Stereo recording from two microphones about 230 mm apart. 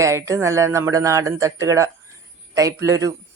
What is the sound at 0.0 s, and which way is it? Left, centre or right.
Speech, centre.